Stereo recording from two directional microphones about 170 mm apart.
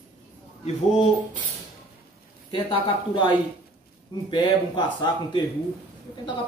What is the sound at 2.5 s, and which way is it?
A woman's voice, 30° left (ahead or behind).